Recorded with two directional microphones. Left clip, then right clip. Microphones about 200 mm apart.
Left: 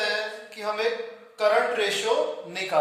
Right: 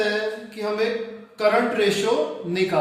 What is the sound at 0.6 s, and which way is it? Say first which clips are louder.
Speech: right 2 dB; 25° left (ahead or behind).